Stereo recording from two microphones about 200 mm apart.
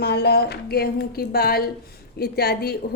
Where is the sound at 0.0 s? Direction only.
55° left (ahead or behind).